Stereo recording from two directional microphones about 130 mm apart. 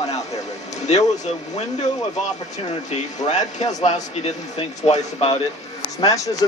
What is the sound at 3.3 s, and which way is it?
A man's voice, 65° left (ahead or behind).